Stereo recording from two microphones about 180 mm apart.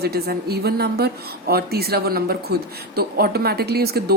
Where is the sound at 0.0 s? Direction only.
60° right (ahead or behind).